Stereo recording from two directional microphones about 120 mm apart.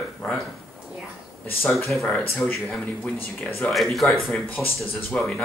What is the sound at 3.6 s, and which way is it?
Speech, centre (ahead or behind).